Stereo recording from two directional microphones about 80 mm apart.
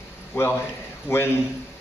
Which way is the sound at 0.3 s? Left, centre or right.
Left.